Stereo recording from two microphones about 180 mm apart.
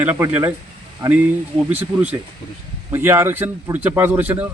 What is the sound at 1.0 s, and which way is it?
Speech, 20° right (ahead or behind).